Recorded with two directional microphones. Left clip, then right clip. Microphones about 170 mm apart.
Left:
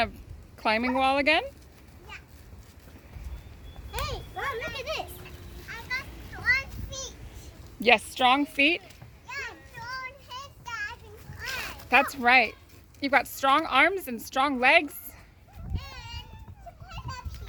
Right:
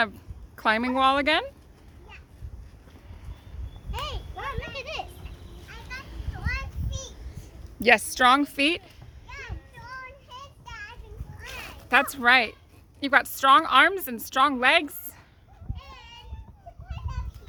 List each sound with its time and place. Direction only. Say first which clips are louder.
0.5 s speech: right 2 dB; 15° right (ahead or behind)
3.9 s a sound: left 1 dB; 50° left (ahead or behind)
4.8 s children playing: left 1 dB; 65° left (ahead or behind)
5.6 s children playing: left 7 dB; 25° right (ahead or behind)
8.2 s a woman's voice: right 2 dB; 25° right (ahead or behind)
9.2 s a sound: left 5 dB; centre (ahead or behind)
11.3 s cat: left 5 dB; centre (ahead or behind)
13.0 s speech: right 3 dB; 5° right (ahead or behind)
15.7 s children playing: left 3 dB; 5° right (ahead or behind)